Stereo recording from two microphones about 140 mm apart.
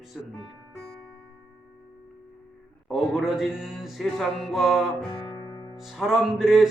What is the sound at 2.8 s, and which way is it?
Speech, centre (ahead or behind).